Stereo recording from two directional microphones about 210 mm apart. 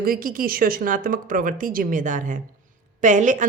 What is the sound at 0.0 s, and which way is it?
Speech, 45° right (ahead or behind).